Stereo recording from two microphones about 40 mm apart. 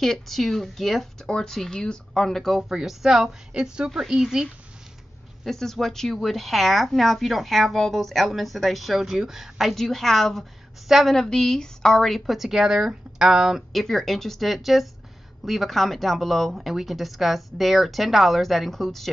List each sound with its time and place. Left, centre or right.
0.0 s speech: centre
1.2 s speech: centre
2.7 s speech: centre
3.5 s speech: right
3.9 s speech: centre
5.4 s speech: centre
12.3 s speech: centre
13.7 s speech: centre